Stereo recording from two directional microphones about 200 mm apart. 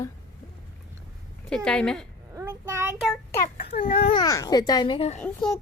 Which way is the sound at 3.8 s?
25° left (ahead or behind).